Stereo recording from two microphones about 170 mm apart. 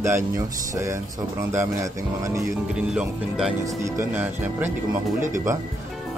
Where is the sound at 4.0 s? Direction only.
10° right (ahead or behind).